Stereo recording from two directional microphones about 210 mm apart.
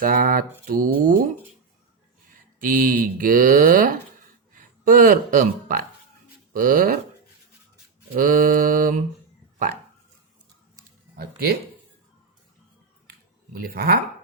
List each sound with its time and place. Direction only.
0.0 s speech: 45° right (ahead or behind)
2.6 s speech: 40° right (ahead or behind)
8.1 s speech: 40° right (ahead or behind)
13.1 s a sound: 45° right (ahead or behind)